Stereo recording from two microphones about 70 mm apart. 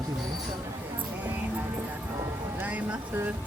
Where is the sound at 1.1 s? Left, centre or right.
Right.